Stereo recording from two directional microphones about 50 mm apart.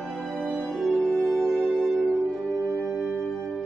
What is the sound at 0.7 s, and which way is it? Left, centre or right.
Music, centre.